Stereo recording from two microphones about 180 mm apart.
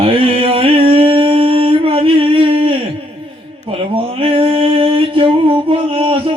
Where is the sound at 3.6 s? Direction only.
30° right (ahead or behind).